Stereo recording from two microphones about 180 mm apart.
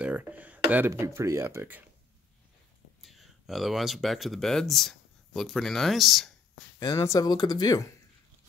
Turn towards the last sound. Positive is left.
turn(degrees=20)  # may be behind; listen again after turning